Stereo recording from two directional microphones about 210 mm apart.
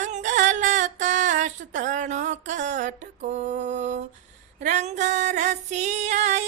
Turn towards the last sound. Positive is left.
turn(degrees=-35)  # may be behind; listen again after turning